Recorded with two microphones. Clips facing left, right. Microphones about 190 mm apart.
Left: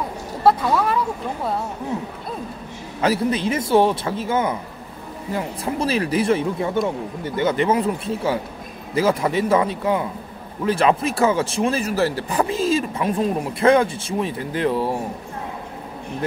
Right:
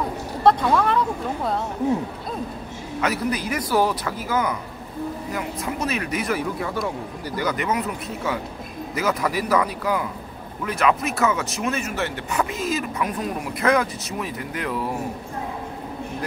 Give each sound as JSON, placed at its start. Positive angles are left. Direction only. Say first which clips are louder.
{"t": 0.4, "sound": "speech", "louder": "even", "side_deg": 5}
{"t": 3.0, "sound": "speech", "louder": "left 4 dB", "side_deg": 30}